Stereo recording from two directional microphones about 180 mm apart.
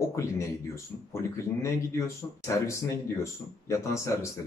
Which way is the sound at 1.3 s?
15° left (ahead or behind).